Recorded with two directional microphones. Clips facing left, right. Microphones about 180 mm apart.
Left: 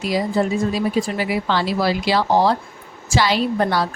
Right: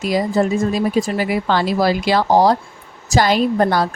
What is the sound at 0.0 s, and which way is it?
A woman's voice, 45° right (ahead or behind).